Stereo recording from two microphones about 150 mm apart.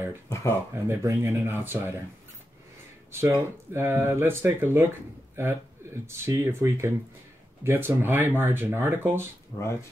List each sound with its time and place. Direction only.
0.3 s speech: 20° left (ahead or behind)
0.7 s speech: 20° right (ahead or behind)
3.1 s a man's voice: 15° right (ahead or behind)
9.5 s speech: 25° left (ahead or behind)